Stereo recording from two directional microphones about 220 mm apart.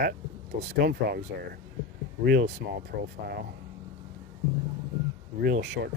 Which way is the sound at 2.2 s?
45° right (ahead or behind).